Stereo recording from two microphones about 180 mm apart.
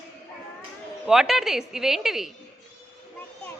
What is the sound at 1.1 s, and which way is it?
A woman's voice, centre (ahead or behind).